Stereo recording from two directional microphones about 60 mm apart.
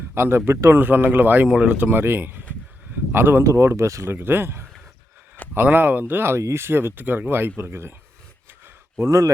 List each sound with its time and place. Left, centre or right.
0.1 s speech: right
0.8 s speech: right
1.5 s speech: right
2.9 s a sound: right
3.4 s speech: right
9.0 s speech: right